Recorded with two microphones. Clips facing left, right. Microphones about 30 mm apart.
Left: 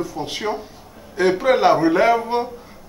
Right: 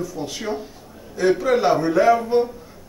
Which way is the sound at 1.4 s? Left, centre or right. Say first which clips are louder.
Left 3 dB; left.